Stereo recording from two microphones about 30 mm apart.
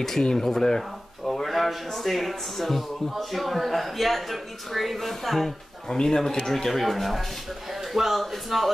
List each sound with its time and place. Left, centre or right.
0.4 s speech: centre
5.9 s speech: centre
6.7 s speech: centre